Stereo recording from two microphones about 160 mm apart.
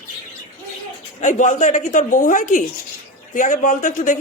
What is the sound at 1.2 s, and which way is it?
Speech, 50° left (ahead or behind).